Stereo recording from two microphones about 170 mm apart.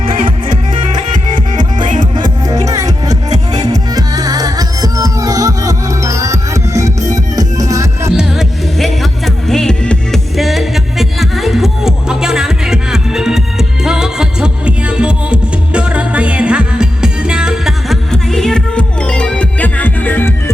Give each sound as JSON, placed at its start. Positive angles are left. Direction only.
{"t": 0.0, "sound": "music", "side_deg": -55}
{"t": 2.1, "sound": "music", "side_deg": -25}
{"t": 8.1, "sound": "music", "side_deg": -5}